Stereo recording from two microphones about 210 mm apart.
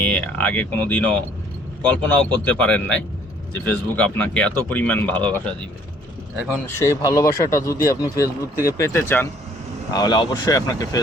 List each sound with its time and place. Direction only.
0.0 s speech: 5° left (ahead or behind)
6.7 s speech: 15° left (ahead or behind)